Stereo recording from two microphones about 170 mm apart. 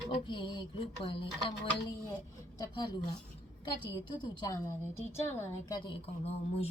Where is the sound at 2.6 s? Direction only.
30° left (ahead or behind).